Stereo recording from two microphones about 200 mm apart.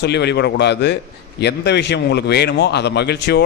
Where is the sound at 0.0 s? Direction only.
55° left (ahead or behind).